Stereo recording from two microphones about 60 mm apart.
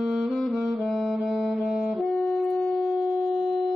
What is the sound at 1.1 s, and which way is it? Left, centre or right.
Music, centre.